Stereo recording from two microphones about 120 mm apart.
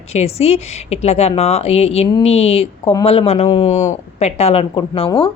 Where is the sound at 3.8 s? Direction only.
70° left (ahead or behind); by 5.3 s 50° left (ahead or behind).